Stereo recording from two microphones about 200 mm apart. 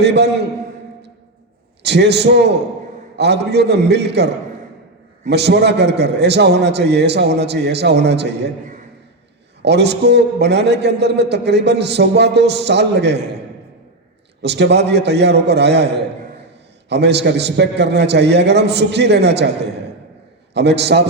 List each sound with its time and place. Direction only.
0.0 s a man's voice: 55° right (ahead or behind)
1.8 s a man's voice: 55° right (ahead or behind)
9.6 s a man's voice: 55° right (ahead or behind)
14.4 s a man's voice: 60° right (ahead or behind)
20.5 s a man's voice: 55° right (ahead or behind)